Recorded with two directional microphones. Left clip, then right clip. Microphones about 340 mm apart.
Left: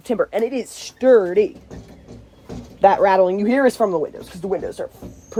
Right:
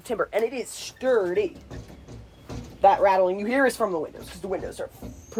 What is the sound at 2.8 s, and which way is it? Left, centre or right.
Speech, left.